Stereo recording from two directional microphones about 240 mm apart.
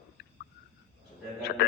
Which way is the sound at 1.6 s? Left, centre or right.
Left.